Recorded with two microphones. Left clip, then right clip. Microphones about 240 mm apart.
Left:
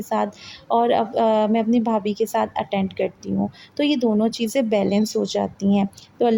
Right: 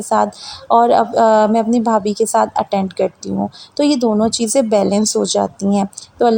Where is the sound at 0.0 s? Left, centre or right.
Right.